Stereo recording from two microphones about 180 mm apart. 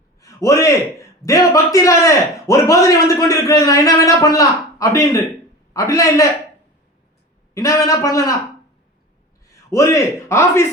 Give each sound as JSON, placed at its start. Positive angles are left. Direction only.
{"t": 0.2, "sound": "a sound", "side_deg": 15}
{"t": 1.2, "sound": "a man's voice", "side_deg": 20}
{"t": 7.5, "sound": "a man's voice", "side_deg": 20}
{"t": 9.6, "sound": "a man's voice", "side_deg": 15}